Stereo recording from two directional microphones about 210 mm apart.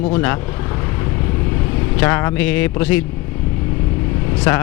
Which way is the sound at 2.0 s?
10° left (ahead or behind).